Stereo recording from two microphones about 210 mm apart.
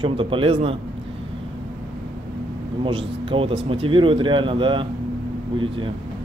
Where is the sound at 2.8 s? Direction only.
25° right (ahead or behind).